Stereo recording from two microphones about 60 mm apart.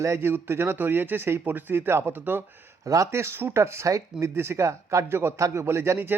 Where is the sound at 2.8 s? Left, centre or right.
Right.